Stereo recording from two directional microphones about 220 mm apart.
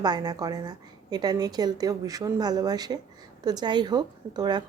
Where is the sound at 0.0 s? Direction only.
20° right (ahead or behind).